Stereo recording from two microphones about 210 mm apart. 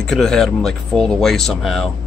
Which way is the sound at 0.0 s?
Centre (ahead or behind).